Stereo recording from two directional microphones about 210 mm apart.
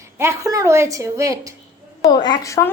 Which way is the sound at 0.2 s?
15° right (ahead or behind).